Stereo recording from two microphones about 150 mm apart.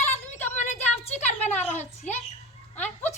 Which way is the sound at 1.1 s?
50° left (ahead or behind).